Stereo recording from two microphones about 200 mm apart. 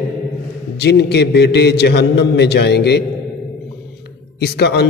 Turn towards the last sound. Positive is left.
turn(degrees=55)  # may be behind; listen again after turning